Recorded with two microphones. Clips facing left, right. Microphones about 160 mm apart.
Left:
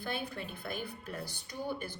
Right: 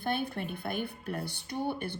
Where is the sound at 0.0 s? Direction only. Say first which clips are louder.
Right 6 dB; 60° right (ahead or behind).